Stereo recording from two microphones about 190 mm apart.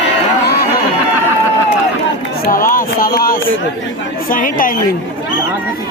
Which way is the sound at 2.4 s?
50° left (ahead or behind).